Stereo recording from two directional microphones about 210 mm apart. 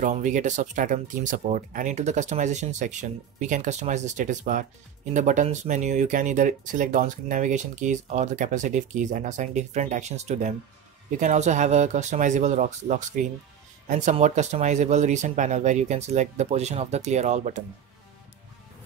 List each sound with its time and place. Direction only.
0.0 s speech: 35° right (ahead or behind)